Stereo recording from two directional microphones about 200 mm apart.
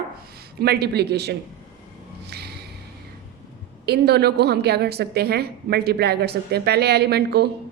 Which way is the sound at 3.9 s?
55° right (ahead or behind).